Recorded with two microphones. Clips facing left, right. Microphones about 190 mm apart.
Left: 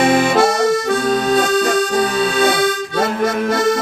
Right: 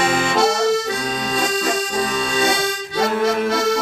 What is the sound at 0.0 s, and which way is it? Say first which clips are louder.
Accordion: left 5 dB; 55° left (ahead or behind).